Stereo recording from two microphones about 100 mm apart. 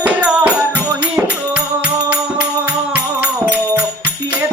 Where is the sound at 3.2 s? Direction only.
15° right (ahead or behind).